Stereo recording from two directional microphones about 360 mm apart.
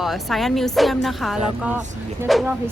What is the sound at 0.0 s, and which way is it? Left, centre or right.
Speech, centre.